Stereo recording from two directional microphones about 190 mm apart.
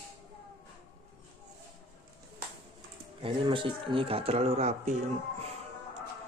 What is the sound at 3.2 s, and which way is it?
Speech, 25° right (ahead or behind).